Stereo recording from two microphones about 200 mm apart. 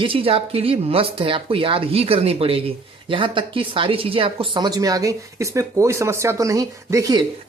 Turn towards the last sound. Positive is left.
turn(degrees=-15)  # may be behind; listen again after turning